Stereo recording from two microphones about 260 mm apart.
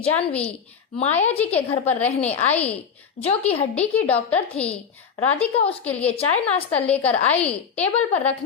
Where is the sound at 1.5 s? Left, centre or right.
Left.